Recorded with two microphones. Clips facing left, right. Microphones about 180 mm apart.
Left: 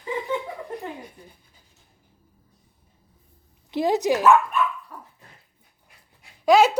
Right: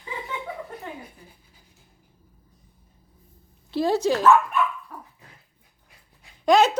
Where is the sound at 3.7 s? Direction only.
15° left (ahead or behind).